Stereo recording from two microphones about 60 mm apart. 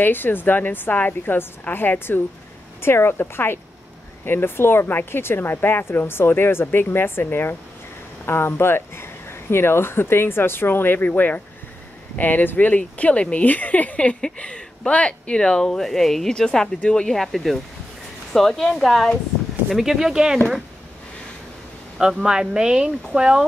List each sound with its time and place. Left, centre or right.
0.0 s speech: left
14.2 s speech: centre
21.9 s speech: centre